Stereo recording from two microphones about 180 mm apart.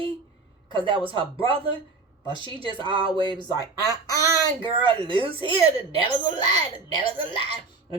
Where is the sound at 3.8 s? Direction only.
20° left (ahead or behind).